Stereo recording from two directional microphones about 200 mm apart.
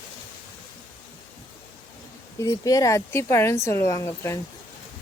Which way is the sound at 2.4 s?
20° left (ahead or behind).